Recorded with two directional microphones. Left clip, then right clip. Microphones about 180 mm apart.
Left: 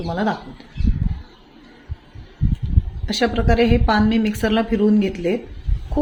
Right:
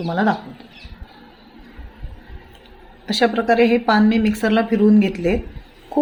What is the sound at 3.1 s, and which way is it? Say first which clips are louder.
A woman's voice: right 3 dB; 5° right (ahead or behind).